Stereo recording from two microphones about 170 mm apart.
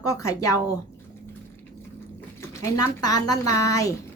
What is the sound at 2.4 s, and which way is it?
Speech, 15° left (ahead or behind).